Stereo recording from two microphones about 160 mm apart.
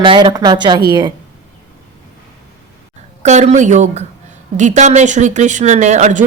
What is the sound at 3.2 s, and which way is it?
Speech, 45° right (ahead or behind).